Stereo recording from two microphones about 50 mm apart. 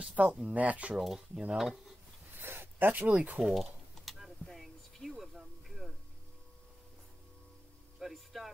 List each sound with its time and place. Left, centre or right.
0.0 s speech: centre
0.6 s speech: right
0.9 s speech: centre
2.3 s a sound: right
3.3 s typing: centre
8.1 s a sound: centre